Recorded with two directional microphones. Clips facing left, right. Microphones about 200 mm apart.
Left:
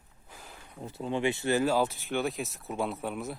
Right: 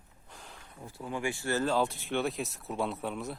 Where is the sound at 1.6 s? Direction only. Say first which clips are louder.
Left 2 dB; 5° left (ahead or behind).